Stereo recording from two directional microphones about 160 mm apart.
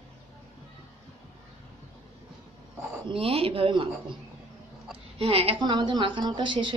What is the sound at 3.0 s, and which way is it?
Speech, 35° right (ahead or behind).